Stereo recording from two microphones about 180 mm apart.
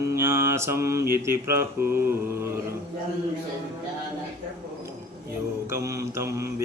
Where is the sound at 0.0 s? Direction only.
15° right (ahead or behind).